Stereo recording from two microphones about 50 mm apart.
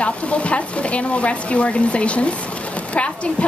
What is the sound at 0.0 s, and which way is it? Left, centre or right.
Speech, left.